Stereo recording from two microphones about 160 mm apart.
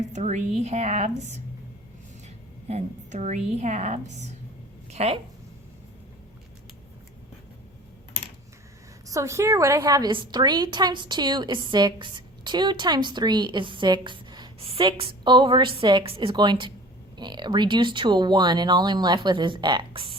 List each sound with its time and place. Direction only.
0.1 s a woman's voice: 45° right (ahead or behind)
2.6 s a woman's voice: 45° right (ahead or behind)
9.0 s a woman's voice: 20° right (ahead or behind)